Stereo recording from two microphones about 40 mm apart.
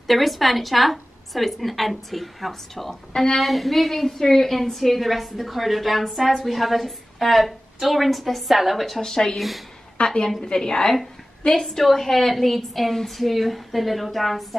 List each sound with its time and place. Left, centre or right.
0.0 s a woman's voice: centre
3.1 s a woman's voice: left
3.3 s a woman's voice: centre
9.1 s a woman's voice: centre